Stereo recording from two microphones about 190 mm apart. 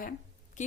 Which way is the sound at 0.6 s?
40° left (ahead or behind).